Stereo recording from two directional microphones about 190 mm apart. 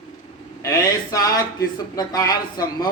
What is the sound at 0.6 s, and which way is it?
Speech, 20° left (ahead or behind).